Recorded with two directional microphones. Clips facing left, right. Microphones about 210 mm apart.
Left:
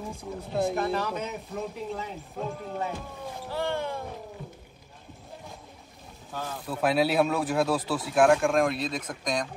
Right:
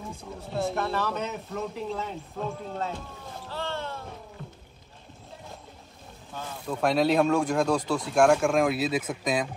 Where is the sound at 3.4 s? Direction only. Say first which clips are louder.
Left 4 dB; 15° left (ahead or behind).